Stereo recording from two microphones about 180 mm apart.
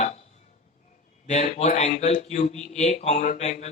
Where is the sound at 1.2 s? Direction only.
40° left (ahead or behind).